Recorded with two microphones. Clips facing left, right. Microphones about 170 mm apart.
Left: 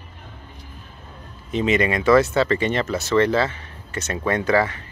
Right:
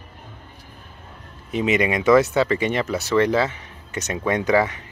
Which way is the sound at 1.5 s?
15° right (ahead or behind).